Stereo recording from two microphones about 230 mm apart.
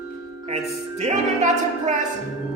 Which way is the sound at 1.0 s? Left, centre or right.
Right.